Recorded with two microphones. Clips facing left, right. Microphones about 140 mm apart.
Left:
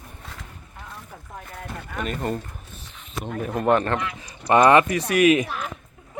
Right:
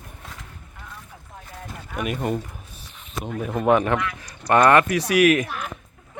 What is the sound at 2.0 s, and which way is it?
Speech, 10° right (ahead or behind).